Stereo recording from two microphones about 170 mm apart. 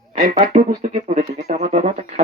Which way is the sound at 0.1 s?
45° right (ahead or behind).